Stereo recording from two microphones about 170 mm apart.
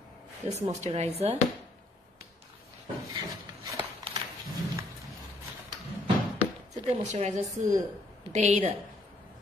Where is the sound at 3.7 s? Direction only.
30° right (ahead or behind).